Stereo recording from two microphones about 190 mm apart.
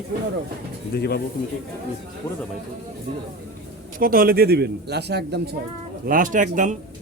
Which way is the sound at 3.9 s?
50° right (ahead or behind).